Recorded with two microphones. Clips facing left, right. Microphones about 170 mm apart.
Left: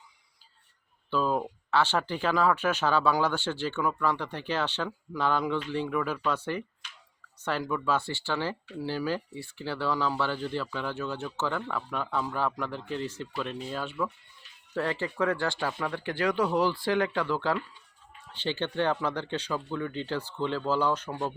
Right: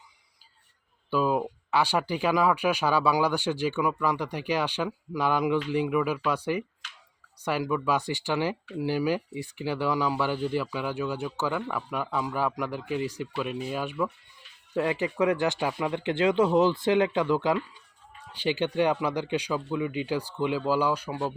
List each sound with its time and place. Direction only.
1.1 s speech: 10° right (ahead or behind)